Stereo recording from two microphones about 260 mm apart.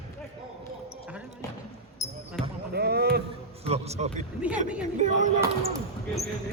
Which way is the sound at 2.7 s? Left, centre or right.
Right.